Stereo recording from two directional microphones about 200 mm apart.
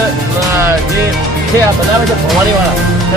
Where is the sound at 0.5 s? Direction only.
10° right (ahead or behind).